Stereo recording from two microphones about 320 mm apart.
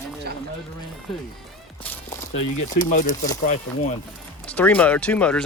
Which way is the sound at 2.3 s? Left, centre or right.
Left.